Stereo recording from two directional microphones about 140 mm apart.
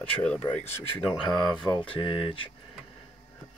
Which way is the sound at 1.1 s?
5° right (ahead or behind).